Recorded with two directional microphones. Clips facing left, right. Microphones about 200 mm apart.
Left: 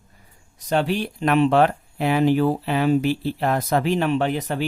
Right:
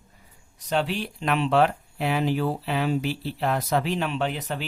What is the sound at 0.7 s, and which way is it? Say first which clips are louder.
Speech: left 4 dB; 50° left (ahead or behind).